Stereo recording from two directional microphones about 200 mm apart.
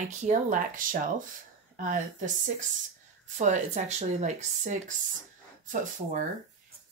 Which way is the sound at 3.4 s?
35° right (ahead or behind).